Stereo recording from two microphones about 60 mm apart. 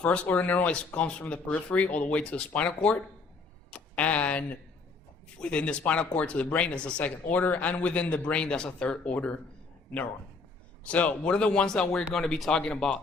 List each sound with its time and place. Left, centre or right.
0.0 s speech: centre
3.7 s a sound: left
5.4 s speech: centre
10.8 s speech: left